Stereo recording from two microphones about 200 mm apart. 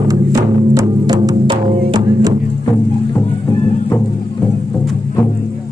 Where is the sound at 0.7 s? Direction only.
20° right (ahead or behind).